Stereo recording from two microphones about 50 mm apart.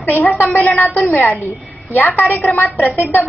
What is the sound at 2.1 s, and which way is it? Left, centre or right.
A woman's voice, left.